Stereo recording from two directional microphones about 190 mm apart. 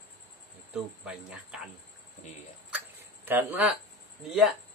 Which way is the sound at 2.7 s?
10° right (ahead or behind).